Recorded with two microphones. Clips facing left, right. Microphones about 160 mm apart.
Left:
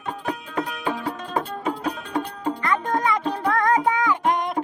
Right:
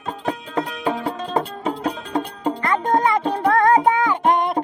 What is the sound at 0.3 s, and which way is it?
Music, 30° right (ahead or behind).